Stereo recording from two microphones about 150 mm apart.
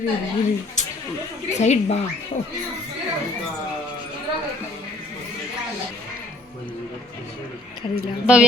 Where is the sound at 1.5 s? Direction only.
45° left (ahead or behind).